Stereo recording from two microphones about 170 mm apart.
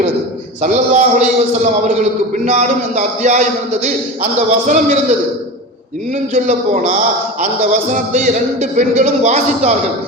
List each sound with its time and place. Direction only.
0.6 s a man's voice: 45° right (ahead or behind)
6.3 s a man's voice: 45° right (ahead or behind)